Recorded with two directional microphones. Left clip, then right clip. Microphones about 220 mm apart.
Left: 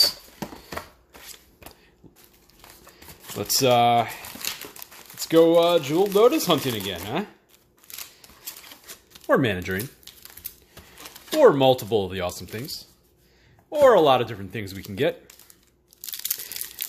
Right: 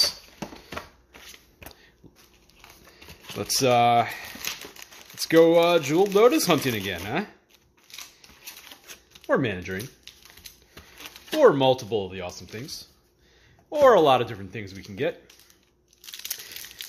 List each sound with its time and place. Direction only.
0.0 s a sound: centre (ahead or behind)
3.3 s speech: centre (ahead or behind)
5.2 s speech: 15° right (ahead or behind)
9.1 s speech: 15° left (ahead or behind)
10.7 s a sound: 10° left (ahead or behind); by 12.4 s 25° left (ahead or behind)
13.7 s speech: 5° right (ahead or behind)
14.5 s speech: 15° left (ahead or behind)
16.2 s crumpling: 5° left (ahead or behind)